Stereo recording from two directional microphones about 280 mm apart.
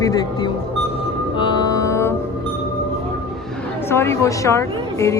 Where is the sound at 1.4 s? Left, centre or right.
Centre.